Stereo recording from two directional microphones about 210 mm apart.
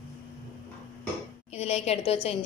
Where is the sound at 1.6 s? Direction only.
30° left (ahead or behind).